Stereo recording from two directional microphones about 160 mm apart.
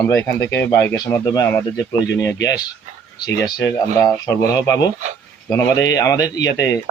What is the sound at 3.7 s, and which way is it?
A man's voice, 20° left (ahead or behind).